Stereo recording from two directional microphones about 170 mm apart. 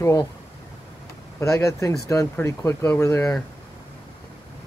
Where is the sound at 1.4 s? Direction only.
15° left (ahead or behind).